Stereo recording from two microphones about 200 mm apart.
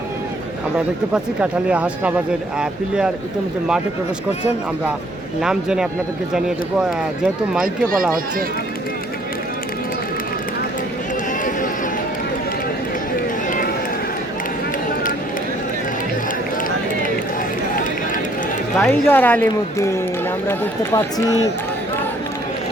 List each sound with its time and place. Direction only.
1.1 s speech: 5° right (ahead or behind)
5.4 s speech: 5° right (ahead or behind)
18.8 s a woman's voice: 10° left (ahead or behind)